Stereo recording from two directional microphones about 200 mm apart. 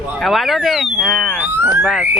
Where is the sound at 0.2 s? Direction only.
Centre (ahead or behind).